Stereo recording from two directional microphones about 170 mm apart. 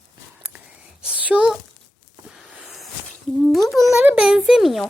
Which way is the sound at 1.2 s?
10° right (ahead or behind).